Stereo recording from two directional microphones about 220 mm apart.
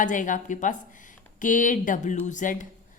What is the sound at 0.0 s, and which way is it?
A woman's voice, 35° left (ahead or behind).